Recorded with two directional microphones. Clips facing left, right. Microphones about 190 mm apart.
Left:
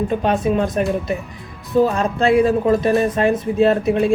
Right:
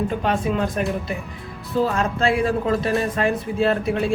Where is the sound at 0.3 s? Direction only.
25° left (ahead or behind).